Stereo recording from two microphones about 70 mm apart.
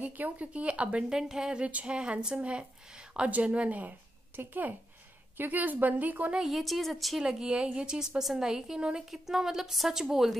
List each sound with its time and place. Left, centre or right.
0.0 s a woman's voice: right
6.3 s a woman's voice: centre
7.2 s a woman's voice: centre